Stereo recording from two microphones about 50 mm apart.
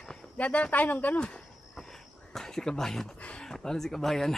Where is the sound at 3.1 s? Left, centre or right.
Left.